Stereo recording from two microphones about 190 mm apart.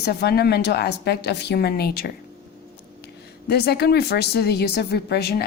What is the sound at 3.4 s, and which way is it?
A woman's voice, 60° left (ahead or behind).